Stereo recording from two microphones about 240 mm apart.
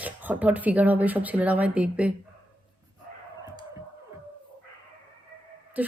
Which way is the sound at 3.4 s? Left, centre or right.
Centre.